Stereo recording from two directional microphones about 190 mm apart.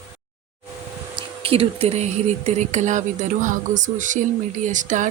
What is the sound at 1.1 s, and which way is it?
Speech, 30° right (ahead or behind).